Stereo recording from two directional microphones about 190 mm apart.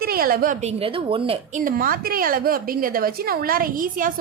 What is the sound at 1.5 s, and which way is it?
A woman's voice, 50° right (ahead or behind).